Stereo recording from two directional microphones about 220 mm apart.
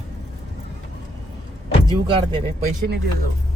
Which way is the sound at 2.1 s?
25° right (ahead or behind).